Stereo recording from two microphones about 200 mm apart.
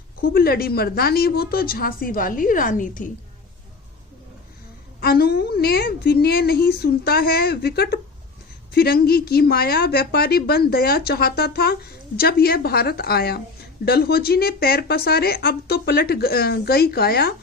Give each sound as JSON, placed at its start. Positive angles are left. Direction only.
{"t": 0.2, "sound": "a woman's voice", "side_deg": 50}
{"t": 4.9, "sound": "a woman's voice", "side_deg": 50}